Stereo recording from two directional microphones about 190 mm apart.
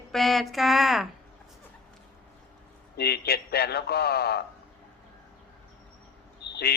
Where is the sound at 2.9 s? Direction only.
55° left (ahead or behind).